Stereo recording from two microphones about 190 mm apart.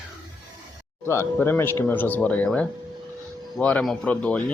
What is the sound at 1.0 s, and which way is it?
A man's voice, 15° left (ahead or behind).